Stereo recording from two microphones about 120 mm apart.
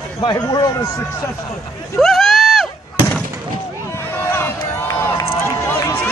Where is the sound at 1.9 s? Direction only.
Centre (ahead or behind).